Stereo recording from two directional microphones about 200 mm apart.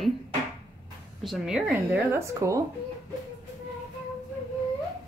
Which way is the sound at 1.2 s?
5° right (ahead or behind).